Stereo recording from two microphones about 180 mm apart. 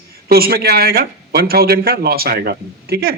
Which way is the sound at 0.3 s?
60° right (ahead or behind).